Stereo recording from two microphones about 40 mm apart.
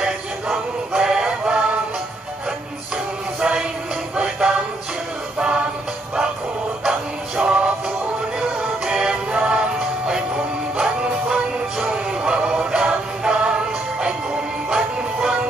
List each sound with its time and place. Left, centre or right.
0.0 s music: centre
3.3 s music: right
7.3 s music: right
15.1 s music: right